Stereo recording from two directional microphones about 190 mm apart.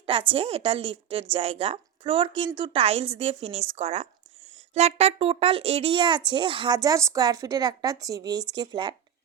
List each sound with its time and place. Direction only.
0.0 s speech: 30° right (ahead or behind)